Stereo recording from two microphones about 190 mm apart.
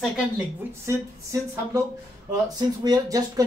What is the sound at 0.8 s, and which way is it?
A woman's voice, 15° right (ahead or behind).